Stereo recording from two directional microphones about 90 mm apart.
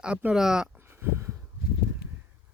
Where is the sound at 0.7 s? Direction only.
25° right (ahead or behind).